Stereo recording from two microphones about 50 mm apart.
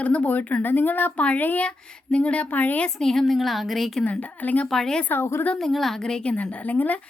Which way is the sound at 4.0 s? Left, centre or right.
Left.